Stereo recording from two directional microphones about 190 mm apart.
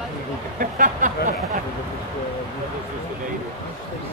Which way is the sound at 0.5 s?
45° right (ahead or behind).